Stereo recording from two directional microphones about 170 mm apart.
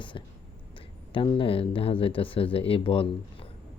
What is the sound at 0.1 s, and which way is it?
Whispering, 25° left (ahead or behind).